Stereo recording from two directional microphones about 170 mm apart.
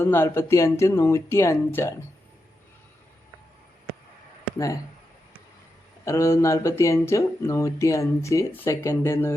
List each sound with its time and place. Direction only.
0.0 s speech: 15° left (ahead or behind)
4.5 s speech: 20° left (ahead or behind)
6.1 s speech: 15° left (ahead or behind)